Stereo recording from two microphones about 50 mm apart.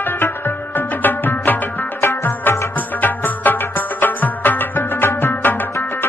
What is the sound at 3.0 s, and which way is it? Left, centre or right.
Music, left.